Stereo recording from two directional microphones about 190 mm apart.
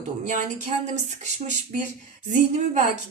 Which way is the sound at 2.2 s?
40° right (ahead or behind).